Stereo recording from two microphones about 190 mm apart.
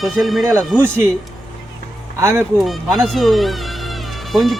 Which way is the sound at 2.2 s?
15° right (ahead or behind).